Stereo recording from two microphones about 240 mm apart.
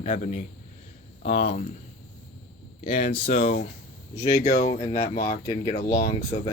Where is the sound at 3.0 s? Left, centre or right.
Left.